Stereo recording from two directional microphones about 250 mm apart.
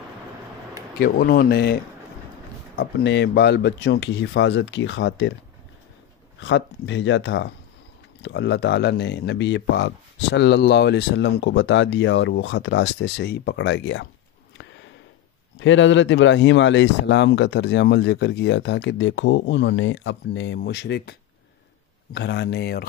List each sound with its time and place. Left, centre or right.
0.9 s speech: left
2.8 s speech: left
6.4 s speech: left
15.6 s speech: left